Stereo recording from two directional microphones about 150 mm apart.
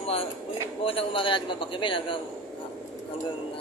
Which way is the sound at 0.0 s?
40° left (ahead or behind).